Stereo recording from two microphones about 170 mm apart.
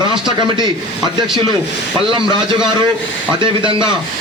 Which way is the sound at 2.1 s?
30° right (ahead or behind).